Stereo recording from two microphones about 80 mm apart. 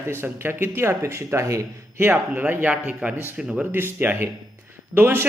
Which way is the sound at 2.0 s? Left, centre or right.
Right.